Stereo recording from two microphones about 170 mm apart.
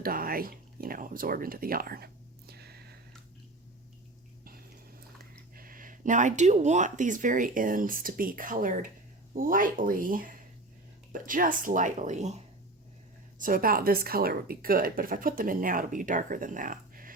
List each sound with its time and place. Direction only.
0.0 s speech: 60° right (ahead or behind)
2.5 s a sound: 70° right (ahead or behind)
5.5 s speech: 55° right (ahead or behind)
13.4 s speech: 55° right (ahead or behind)